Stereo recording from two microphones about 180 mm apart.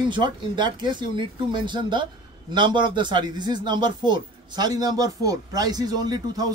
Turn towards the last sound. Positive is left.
turn(degrees=-20)  # may be behind; listen again after turning